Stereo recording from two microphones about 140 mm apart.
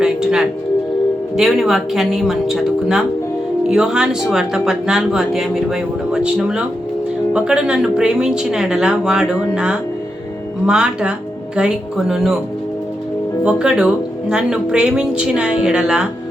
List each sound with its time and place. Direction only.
0.0 s tuning fork: 5° right (ahead or behind)
1.4 s speech: centre (ahead or behind)
13.4 s speech: 5° right (ahead or behind)